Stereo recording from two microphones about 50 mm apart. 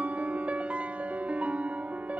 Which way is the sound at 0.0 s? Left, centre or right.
Right.